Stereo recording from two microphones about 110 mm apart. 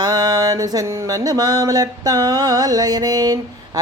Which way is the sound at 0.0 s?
35° right (ahead or behind).